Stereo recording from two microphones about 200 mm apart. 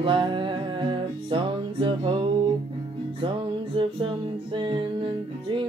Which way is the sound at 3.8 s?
25° right (ahead or behind).